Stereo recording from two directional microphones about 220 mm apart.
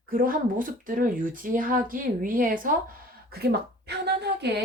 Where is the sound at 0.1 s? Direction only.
40° right (ahead or behind).